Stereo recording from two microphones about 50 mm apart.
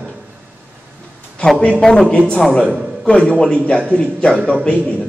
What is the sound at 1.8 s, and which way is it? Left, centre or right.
Speech, centre.